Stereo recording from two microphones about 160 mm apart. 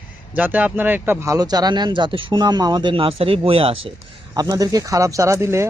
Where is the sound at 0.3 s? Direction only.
10° right (ahead or behind); by 3.9 s 35° right (ahead or behind).